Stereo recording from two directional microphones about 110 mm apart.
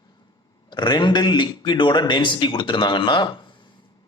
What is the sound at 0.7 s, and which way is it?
Speech, 45° left (ahead or behind).